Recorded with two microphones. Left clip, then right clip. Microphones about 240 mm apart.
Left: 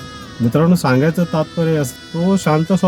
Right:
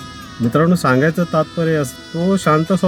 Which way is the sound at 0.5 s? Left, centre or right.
Left.